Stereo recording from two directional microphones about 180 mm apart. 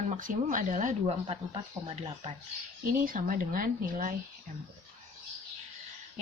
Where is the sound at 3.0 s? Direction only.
50° right (ahead or behind).